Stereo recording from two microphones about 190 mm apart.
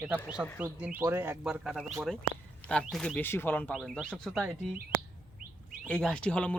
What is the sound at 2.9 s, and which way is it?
Speech, 5° left (ahead or behind).